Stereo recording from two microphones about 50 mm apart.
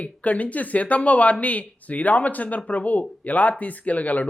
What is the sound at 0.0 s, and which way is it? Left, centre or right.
A woman's voice, left.